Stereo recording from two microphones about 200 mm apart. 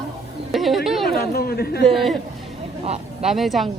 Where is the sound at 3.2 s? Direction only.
Centre (ahead or behind).